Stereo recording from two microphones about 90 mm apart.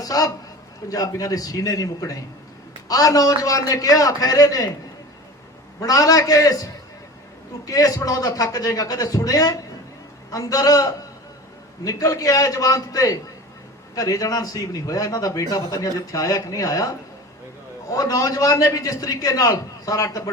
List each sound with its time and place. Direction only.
0.0 s a man's voice: 45° left (ahead or behind)
5.8 s a man's voice: 40° left (ahead or behind)
7.7 s a man's voice: 40° left (ahead or behind)
17.9 s a man's voice: 40° left (ahead or behind)